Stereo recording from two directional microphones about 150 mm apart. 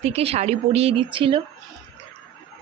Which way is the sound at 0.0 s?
45° right (ahead or behind).